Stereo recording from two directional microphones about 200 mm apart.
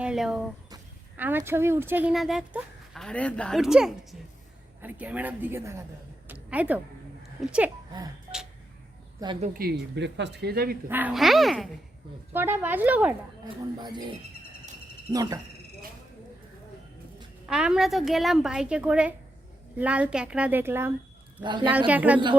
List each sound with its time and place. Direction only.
0.0 s a child's voice: 5° right (ahead or behind)
9.4 s speech: 45° right (ahead or behind)
9.9 s speech: 60° right (ahead or behind)
10.8 s a woman's voice: 10° right (ahead or behind)
12.3 s a child's voice: 10° right (ahead or behind)
13.4 s a child's voice: 20° right (ahead or behind)
17.5 s a woman's voice: 5° right (ahead or behind)
21.4 s speech: 25° right (ahead or behind)
21.8 s a child's voice: 5° right (ahead or behind)